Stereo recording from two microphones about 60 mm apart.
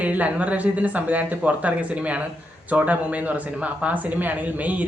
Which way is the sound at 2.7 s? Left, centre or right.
Right.